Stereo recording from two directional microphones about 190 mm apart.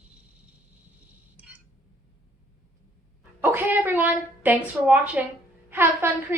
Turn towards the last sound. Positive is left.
turn(degrees=-10)  # may be behind; listen again after turning